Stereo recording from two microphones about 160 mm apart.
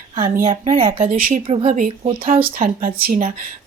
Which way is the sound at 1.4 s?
45° right (ahead or behind).